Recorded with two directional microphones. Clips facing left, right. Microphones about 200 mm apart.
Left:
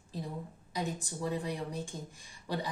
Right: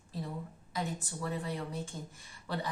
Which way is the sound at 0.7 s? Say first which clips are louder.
Left 1 dB; 15° left (ahead or behind).